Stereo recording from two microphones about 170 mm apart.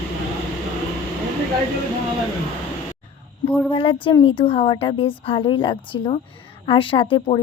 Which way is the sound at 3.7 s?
30° left (ahead or behind).